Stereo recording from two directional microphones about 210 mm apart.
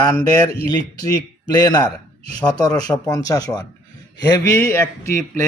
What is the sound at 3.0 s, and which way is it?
Speech, 15° left (ahead or behind).